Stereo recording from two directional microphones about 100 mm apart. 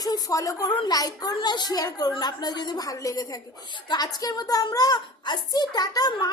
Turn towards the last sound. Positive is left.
turn(degrees=40)  # may be behind; listen again after turning